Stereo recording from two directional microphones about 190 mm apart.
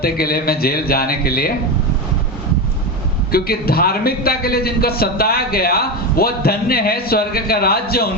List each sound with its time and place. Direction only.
0.0 s a man's voice: 50° left (ahead or behind)
3.3 s a man's voice: 55° left (ahead or behind)